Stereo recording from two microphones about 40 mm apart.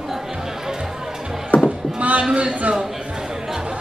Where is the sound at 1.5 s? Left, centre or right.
Left.